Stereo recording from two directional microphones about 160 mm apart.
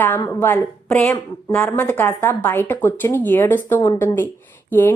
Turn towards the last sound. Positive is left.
turn(degrees=10)  # may be behind; listen again after turning